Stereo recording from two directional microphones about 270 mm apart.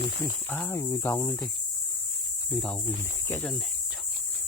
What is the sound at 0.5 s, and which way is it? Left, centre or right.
Speech, centre.